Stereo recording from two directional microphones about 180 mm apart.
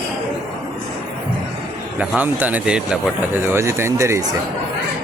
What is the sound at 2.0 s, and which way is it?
Speech, 10° right (ahead or behind).